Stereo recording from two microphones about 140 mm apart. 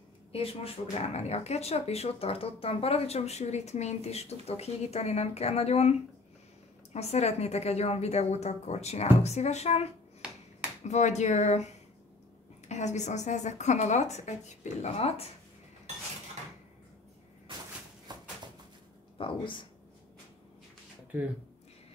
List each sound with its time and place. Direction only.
0.3 s speech: 45° left (ahead or behind)
18.1 s a sound: 30° right (ahead or behind)
19.1 s speech: 35° left (ahead or behind)